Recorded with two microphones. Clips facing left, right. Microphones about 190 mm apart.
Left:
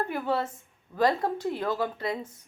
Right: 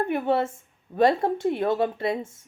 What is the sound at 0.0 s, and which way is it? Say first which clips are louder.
Speech: right 5 dB; 25° right (ahead or behind).